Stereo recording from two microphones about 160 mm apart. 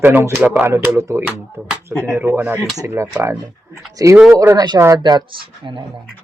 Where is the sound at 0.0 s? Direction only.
15° right (ahead or behind); by 5.8 s 30° right (ahead or behind).